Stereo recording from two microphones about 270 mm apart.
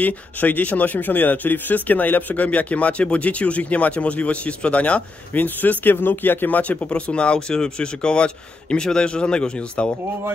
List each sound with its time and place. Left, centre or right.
0.0 s speech: centre